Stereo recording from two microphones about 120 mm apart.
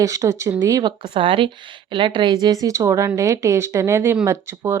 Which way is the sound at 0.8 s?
40° right (ahead or behind).